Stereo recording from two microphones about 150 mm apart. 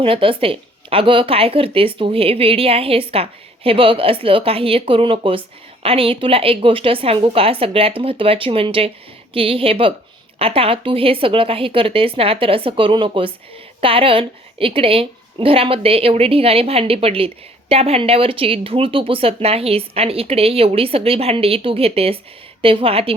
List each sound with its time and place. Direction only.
0.0 s a woman's voice: 35° right (ahead or behind)